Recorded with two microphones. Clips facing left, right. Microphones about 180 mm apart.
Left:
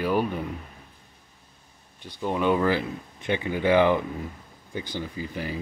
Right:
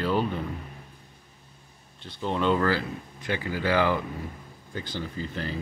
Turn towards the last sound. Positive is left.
turn(degrees=15)  # may be behind; listen again after turning